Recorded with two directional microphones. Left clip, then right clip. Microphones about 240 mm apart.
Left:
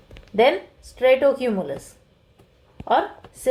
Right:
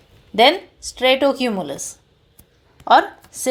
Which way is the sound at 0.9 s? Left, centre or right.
Right.